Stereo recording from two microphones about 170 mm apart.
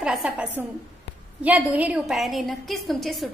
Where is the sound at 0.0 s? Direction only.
5° right (ahead or behind).